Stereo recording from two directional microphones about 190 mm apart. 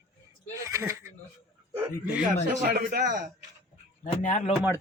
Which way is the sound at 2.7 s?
50° right (ahead or behind).